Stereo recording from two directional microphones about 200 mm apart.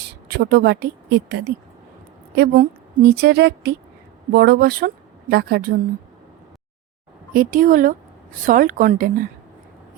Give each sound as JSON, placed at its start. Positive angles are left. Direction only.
{"t": 0.0, "sound": "a woman's voice", "side_deg": -55}
{"t": 7.3, "sound": "speech", "side_deg": -45}